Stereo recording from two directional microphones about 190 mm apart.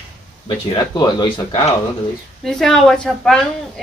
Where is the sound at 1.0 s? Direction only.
20° left (ahead or behind).